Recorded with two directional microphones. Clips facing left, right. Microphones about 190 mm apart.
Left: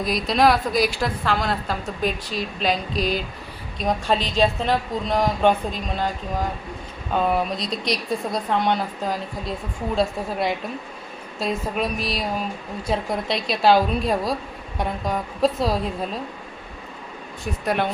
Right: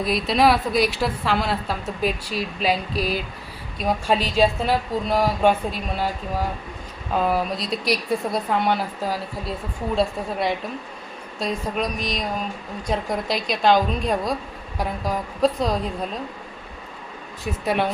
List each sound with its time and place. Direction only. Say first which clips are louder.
0.0 s a woman's voice: even; centre (ahead or behind)
7.1 s a woman's voice: even; centre (ahead or behind)
17.4 s a woman's voice: right 1 dB; centre (ahead or behind)